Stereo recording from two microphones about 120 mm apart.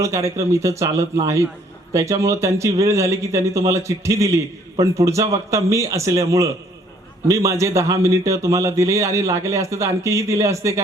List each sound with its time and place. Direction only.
0.0 s speech: 25° right (ahead or behind)